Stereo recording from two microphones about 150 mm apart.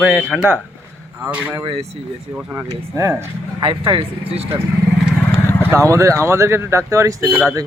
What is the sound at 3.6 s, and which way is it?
Speech, 35° right (ahead or behind).